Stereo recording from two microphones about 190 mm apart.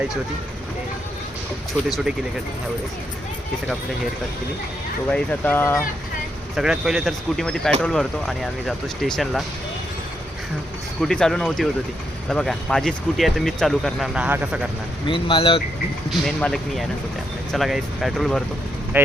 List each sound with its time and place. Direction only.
5.1 s speech: 10° left (ahead or behind)
6.6 s speech: 5° right (ahead or behind)
11.0 s speech: 5° left (ahead or behind)
15.0 s speech: 25° left (ahead or behind)
16.0 s speech: centre (ahead or behind)
18.9 s speech: 10° right (ahead or behind)